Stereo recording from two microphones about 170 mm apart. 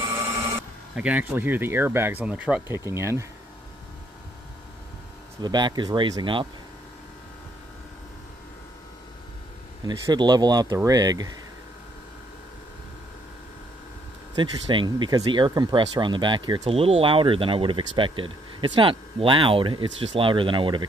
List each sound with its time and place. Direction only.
0.9 s speech: 10° right (ahead or behind)
5.4 s speech: 25° right (ahead or behind)
9.8 s speech: 25° right (ahead or behind)
14.3 s speech: 30° right (ahead or behind)